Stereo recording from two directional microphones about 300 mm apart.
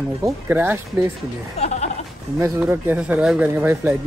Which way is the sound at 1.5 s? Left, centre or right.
Left.